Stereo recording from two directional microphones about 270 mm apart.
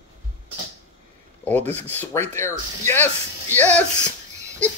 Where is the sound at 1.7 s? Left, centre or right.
Centre.